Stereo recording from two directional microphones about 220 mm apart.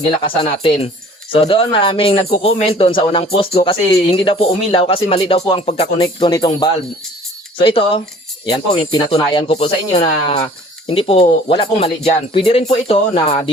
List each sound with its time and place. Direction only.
0.2 s speech: 25° left (ahead or behind)